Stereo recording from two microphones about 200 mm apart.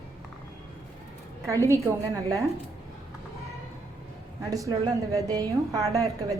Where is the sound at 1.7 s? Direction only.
15° right (ahead or behind).